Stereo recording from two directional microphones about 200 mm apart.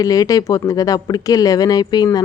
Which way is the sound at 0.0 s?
15° left (ahead or behind).